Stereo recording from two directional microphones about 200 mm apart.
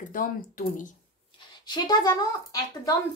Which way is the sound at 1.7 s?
20° left (ahead or behind).